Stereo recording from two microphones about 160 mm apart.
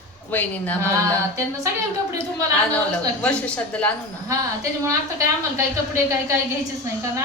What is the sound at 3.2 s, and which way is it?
Speech, 5° left (ahead or behind).